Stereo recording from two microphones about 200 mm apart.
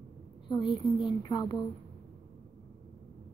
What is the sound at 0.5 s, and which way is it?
A woman's voice, 25° left (ahead or behind).